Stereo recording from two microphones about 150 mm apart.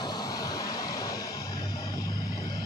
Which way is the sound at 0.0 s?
25° left (ahead or behind).